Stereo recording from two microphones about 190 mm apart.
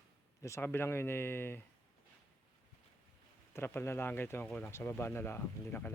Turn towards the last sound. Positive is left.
turn(degrees=10)  # may be behind; listen again after turning